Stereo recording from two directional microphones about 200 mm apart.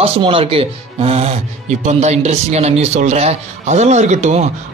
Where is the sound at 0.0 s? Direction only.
25° right (ahead or behind).